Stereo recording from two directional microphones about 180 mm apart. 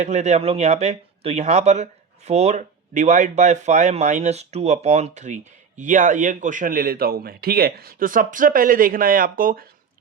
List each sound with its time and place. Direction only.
0.0 s speech: 40° right (ahead or behind)